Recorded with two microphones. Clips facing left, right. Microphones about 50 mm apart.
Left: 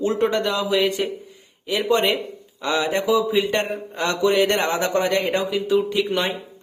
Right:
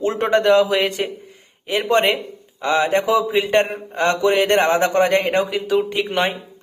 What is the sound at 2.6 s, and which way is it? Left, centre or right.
Speech, right.